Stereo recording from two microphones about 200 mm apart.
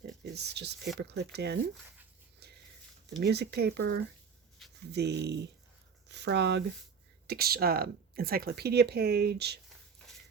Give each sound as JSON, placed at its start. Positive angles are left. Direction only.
{"t": 0.3, "sound": "speech", "side_deg": -55}
{"t": 3.1, "sound": "speech", "side_deg": -55}